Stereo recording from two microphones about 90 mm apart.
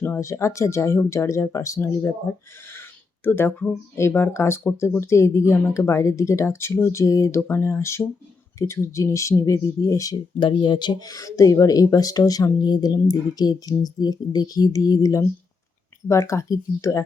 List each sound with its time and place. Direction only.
0.0 s speech: 30° left (ahead or behind)
3.2 s speech: 25° left (ahead or behind); by 10.2 s 40° left (ahead or behind)
10.4 s speech: 60° left (ahead or behind)
11.0 s speech: 40° left (ahead or behind)